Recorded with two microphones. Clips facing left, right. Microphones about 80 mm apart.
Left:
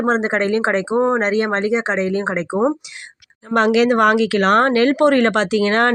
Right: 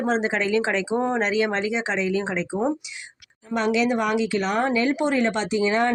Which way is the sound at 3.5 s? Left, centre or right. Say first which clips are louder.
Left 8 dB; left.